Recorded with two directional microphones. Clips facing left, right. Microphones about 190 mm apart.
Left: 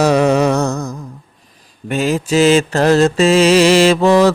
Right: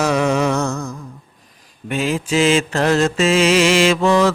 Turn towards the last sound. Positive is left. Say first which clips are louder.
# left 4 dB
turn(degrees=35)  # may be behind; listen again after turning